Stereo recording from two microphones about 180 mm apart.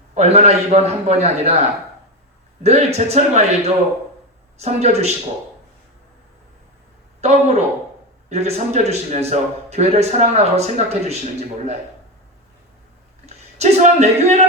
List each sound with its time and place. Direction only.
0.1 s speech: 35° right (ahead or behind)
2.6 s speech: 35° right (ahead or behind)
7.2 s speech: 40° right (ahead or behind)
13.2 s speech: 35° right (ahead or behind)